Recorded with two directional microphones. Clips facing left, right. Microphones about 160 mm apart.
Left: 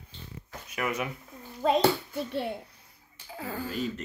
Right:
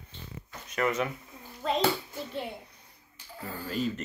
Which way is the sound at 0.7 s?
10° left (ahead or behind).